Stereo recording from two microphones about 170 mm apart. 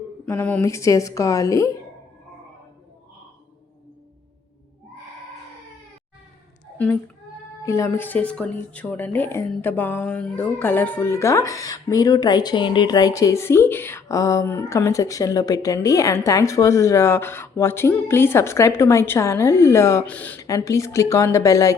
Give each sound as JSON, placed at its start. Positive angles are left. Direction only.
{"t": 0.3, "sound": "speech", "side_deg": 10}
{"t": 6.7, "sound": "a child's voice", "side_deg": 10}